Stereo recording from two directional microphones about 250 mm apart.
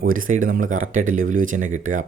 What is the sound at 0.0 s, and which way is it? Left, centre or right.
Speech, right.